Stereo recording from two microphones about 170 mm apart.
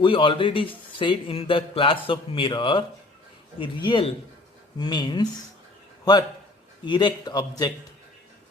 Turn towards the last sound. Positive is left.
turn(degrees=25)  # may be behind; listen again after turning